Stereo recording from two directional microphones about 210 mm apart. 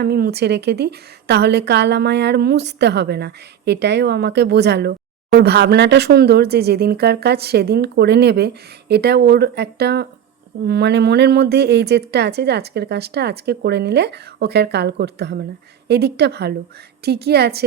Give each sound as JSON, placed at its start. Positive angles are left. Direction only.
{"t": 0.0, "sound": "a woman's voice", "side_deg": -50}